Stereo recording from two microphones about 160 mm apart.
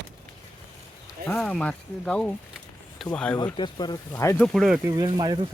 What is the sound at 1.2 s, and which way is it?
Speech, 5° left (ahead or behind).